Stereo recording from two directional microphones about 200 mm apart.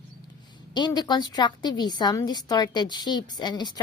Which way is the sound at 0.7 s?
20° left (ahead or behind).